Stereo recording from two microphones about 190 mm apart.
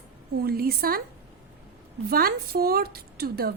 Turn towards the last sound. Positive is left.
turn(degrees=-55)  # may be behind; listen again after turning